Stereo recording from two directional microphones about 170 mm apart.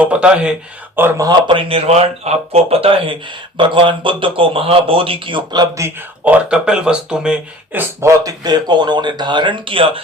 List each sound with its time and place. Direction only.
0.0 s speech: 5° right (ahead or behind); by 10.0 s 30° right (ahead or behind)